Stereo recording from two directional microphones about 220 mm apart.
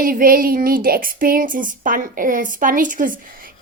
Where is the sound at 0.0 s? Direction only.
40° right (ahead or behind).